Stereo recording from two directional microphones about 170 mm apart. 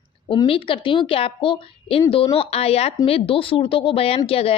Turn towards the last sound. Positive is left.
turn(degrees=35)  # may be behind; listen again after turning